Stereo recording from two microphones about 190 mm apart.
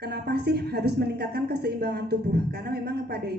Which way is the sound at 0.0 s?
60° right (ahead or behind).